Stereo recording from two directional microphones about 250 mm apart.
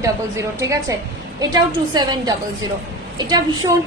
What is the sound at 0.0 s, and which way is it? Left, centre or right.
A woman's voice, centre.